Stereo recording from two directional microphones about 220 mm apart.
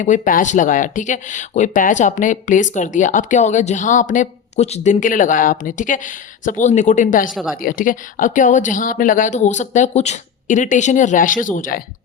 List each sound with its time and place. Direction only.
0.0 s speech: 35° left (ahead or behind)